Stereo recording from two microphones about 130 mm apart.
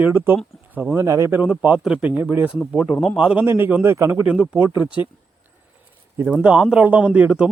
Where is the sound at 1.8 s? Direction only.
5° right (ahead or behind).